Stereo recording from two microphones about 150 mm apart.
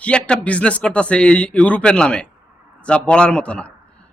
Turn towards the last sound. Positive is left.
turn(degrees=5)  # may be behind; listen again after turning